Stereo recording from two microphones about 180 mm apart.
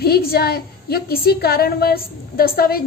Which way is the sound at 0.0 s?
60° left (ahead or behind).